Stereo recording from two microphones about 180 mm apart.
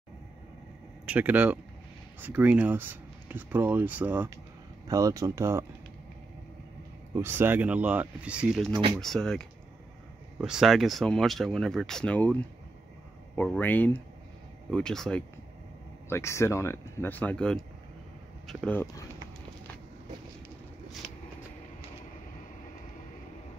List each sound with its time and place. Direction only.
1.0 s speech: 10° right (ahead or behind)
7.2 s speech: 10° right (ahead or behind); by 15.2 s 5° left (ahead or behind)
16.1 s speech: 15° left (ahead or behind)